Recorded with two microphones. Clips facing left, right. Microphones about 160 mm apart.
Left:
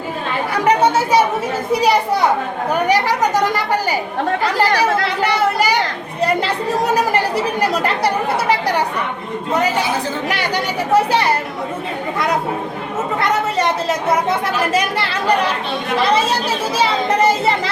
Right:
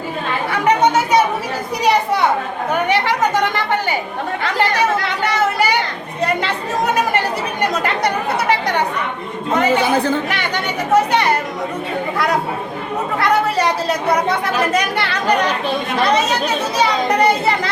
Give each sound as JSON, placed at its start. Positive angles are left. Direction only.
{"t": 1.7, "sound": "speech", "side_deg": 30}
{"t": 4.6, "sound": "speech", "side_deg": 35}
{"t": 6.2, "sound": "speech", "side_deg": 35}
{"t": 9.8, "sound": "speech", "side_deg": -55}
{"t": 10.9, "sound": "speech", "side_deg": 30}
{"t": 14.8, "sound": "speech", "side_deg": 30}